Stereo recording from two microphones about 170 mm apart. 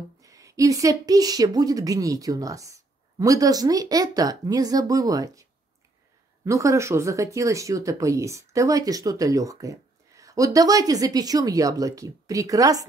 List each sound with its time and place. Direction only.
0.2 s speech: 20° right (ahead or behind)